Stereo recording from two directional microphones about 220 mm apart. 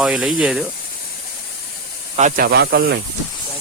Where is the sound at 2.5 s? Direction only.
45° right (ahead or behind).